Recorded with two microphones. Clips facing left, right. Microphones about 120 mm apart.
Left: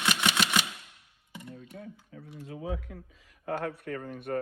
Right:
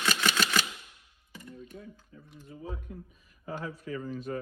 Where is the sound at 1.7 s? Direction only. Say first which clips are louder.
Left 3 dB; 65° left (ahead or behind).